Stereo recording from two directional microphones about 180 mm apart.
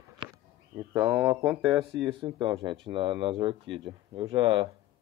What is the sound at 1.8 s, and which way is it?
Speech, 30° right (ahead or behind).